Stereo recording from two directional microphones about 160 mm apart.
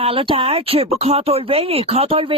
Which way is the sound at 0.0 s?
35° right (ahead or behind).